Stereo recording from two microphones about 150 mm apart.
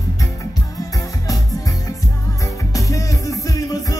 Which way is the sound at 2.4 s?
20° left (ahead or behind).